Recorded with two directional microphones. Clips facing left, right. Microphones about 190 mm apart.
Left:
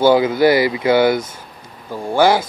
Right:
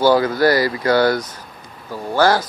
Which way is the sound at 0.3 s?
20° left (ahead or behind).